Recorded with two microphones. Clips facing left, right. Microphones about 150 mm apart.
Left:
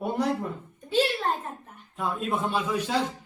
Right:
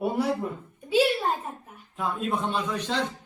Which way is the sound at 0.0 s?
5° right (ahead or behind).